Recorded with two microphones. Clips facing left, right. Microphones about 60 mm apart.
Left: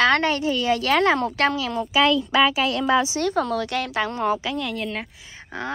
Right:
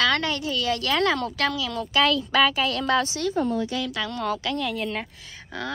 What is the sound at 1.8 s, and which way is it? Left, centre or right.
A woman's voice, centre.